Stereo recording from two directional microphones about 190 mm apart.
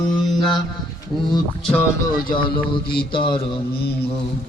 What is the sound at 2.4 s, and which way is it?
Speech, 25° left (ahead or behind).